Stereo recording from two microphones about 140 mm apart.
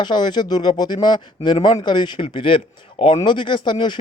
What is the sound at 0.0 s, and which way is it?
A man's voice, 30° left (ahead or behind).